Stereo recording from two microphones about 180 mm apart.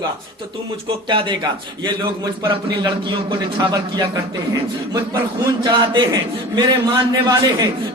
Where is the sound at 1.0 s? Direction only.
25° right (ahead or behind).